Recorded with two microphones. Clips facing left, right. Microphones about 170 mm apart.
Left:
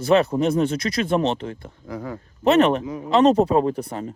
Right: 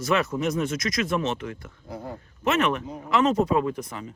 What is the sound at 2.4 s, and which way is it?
Speech, 35° left (ahead or behind).